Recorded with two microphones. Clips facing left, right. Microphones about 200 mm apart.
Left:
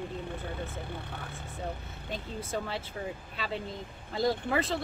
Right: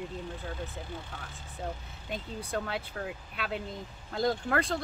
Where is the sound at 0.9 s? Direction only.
60° left (ahead or behind).